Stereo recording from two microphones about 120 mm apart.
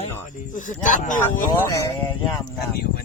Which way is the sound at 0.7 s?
90° left.